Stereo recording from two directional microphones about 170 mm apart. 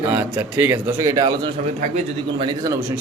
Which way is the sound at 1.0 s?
20° right (ahead or behind).